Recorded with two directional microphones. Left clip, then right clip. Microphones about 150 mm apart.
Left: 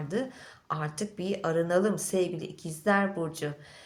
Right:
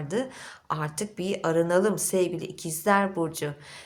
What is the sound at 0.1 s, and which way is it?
A woman's voice, 45° right (ahead or behind).